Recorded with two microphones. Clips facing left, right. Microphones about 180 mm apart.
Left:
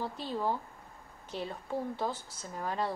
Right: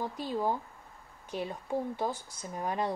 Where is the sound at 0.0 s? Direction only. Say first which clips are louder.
Right 2 dB; 15° right (ahead or behind).